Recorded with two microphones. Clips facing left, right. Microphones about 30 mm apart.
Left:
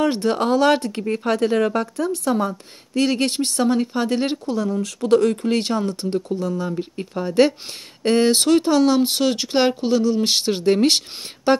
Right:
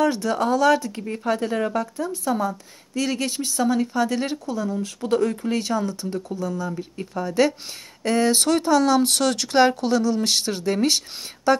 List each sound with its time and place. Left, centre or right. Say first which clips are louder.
0.0 s a woman's voice: left 2 dB; left
3.9 s speech: left 2 dB; left
4.8 s speech: left 6 dB; left
5.3 s a woman's voice: left 3 dB; left
8.3 s speech: left 3 dB; left
10.6 s a woman's voice: left 5 dB; left